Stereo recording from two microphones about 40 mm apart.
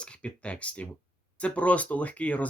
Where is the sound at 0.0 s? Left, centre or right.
Left.